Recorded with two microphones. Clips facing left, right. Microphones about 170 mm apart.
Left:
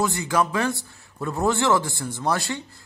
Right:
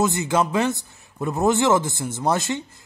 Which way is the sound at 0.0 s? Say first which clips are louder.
Right 2 dB; 20° right (ahead or behind).